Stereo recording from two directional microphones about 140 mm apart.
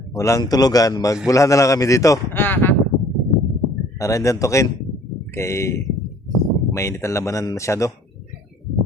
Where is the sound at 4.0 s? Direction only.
25° left (ahead or behind).